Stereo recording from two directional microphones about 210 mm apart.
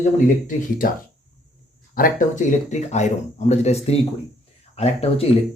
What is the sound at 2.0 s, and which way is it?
Speech, 40° left (ahead or behind).